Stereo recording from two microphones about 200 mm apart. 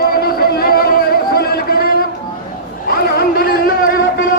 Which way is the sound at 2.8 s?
45° left (ahead or behind).